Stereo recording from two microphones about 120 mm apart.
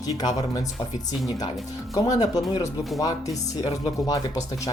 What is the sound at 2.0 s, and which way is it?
Speech, 30° left (ahead or behind).